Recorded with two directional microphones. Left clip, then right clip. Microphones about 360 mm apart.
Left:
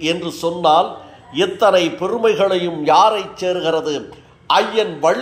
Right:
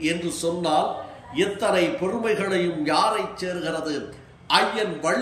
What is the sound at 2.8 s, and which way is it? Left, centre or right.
A man's voice, centre.